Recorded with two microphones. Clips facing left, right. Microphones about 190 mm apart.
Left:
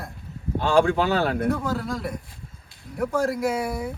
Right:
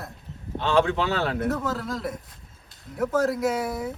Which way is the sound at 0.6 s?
50° left (ahead or behind).